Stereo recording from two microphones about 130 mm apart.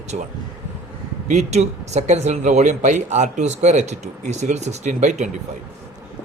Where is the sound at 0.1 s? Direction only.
75° right (ahead or behind).